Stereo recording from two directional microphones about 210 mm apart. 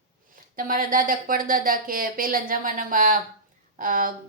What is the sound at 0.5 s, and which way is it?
Speech, 40° right (ahead or behind).